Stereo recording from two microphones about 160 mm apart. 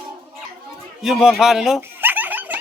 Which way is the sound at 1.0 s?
Centre (ahead or behind).